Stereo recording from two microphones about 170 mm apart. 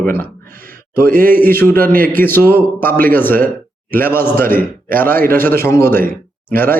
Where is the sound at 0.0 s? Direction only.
10° left (ahead or behind).